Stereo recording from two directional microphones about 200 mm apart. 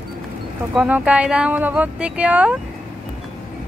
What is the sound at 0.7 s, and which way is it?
Speech, 5° right (ahead or behind).